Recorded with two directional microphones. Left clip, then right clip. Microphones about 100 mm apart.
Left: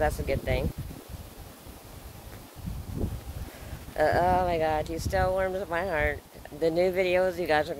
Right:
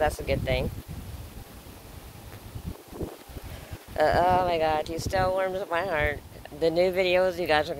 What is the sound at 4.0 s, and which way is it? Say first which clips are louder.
Speech: right 2 dB; 20° left (ahead or behind).